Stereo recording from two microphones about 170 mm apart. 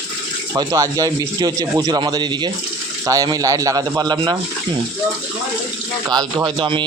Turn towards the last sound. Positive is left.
turn(degrees=-30)  # may be behind; listen again after turning